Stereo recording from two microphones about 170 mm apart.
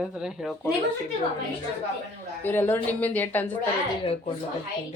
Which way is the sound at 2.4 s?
10° left (ahead or behind).